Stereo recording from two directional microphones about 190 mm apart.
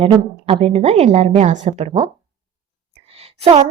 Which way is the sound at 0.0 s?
30° right (ahead or behind).